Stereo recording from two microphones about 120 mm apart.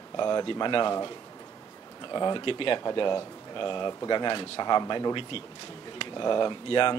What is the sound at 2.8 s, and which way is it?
Speech, 35° left (ahead or behind).